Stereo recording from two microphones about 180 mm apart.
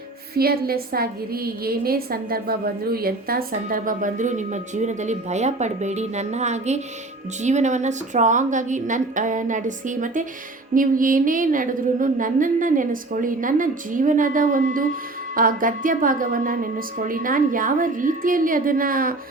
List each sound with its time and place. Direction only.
0.3 s a woman's voice: 60° right (ahead or behind)